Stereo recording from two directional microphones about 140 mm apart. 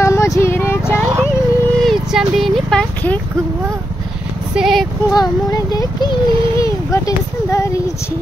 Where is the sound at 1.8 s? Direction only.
Centre (ahead or behind).